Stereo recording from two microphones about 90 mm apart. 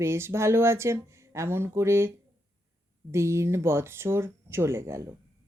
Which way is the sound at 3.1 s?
30° right (ahead or behind).